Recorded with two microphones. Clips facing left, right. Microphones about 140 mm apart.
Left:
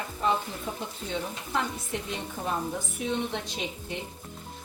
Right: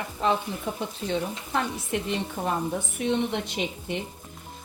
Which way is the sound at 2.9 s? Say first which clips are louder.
Right 5 dB; 65° right (ahead or behind).